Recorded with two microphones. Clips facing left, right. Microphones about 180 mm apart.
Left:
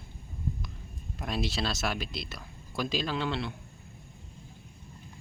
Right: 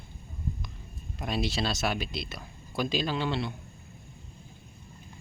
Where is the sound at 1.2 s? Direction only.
Centre (ahead or behind).